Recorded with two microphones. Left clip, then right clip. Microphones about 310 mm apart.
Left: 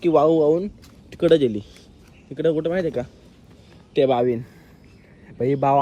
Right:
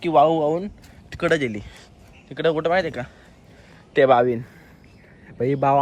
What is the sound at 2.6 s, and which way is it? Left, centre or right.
Speech, centre.